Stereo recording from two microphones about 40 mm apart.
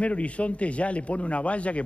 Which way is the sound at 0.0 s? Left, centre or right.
Left.